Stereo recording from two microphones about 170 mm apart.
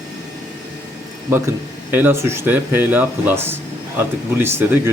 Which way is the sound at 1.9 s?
15° right (ahead or behind).